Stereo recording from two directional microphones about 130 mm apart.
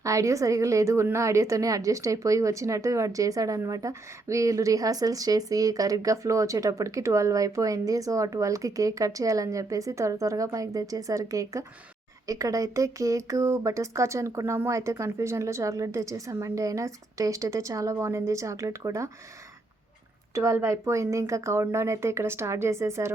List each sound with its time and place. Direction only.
0.0 s a woman's voice: 25° right (ahead or behind)
20.3 s a woman's voice: 25° right (ahead or behind)